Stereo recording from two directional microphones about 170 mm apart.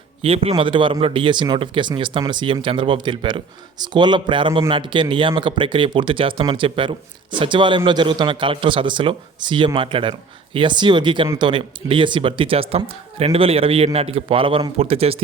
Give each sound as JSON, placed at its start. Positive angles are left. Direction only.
{"t": 0.2, "sound": "speech", "side_deg": -35}